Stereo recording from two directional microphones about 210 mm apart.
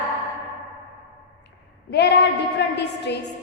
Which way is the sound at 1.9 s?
55° left (ahead or behind).